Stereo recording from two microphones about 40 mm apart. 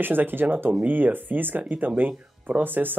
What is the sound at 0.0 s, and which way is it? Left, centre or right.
Speech, right.